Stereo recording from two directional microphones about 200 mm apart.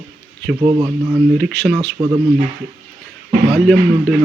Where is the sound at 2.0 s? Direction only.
25° right (ahead or behind).